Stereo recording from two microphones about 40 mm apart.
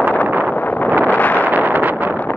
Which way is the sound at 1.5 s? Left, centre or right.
Right.